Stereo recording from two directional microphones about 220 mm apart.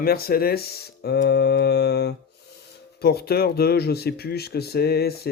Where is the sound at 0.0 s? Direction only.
45° left (ahead or behind).